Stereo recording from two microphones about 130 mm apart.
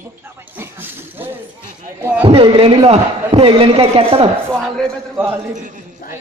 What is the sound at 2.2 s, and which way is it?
A man's voice, 45° right (ahead or behind).